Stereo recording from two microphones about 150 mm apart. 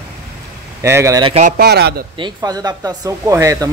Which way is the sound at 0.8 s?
20° right (ahead or behind).